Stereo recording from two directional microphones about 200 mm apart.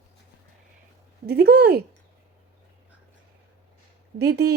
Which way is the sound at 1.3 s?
50° right (ahead or behind).